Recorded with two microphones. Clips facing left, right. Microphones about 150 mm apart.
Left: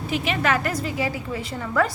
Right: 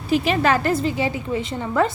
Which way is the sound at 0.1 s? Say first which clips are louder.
Right 5 dB; 35° right (ahead or behind).